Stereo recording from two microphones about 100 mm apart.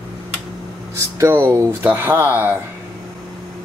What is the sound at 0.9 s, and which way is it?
Speech, 25° right (ahead or behind).